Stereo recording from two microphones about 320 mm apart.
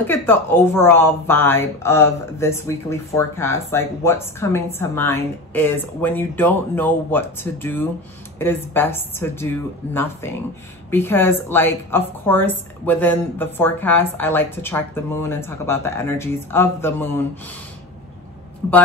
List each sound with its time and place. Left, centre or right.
0.0 s speech: centre